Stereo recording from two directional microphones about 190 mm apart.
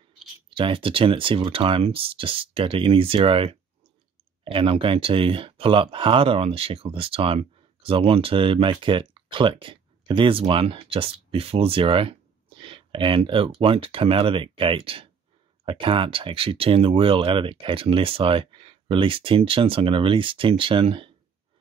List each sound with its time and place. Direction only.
0.6 s speech: 25° right (ahead or behind)